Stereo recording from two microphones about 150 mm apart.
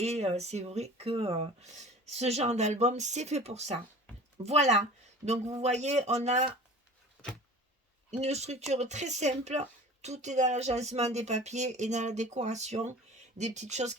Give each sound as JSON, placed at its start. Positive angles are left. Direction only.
{"t": 0.0, "sound": "speech", "side_deg": -45}
{"t": 8.2, "sound": "speech", "side_deg": -45}